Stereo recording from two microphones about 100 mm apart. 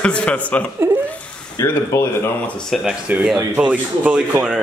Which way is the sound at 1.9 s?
35° left (ahead or behind).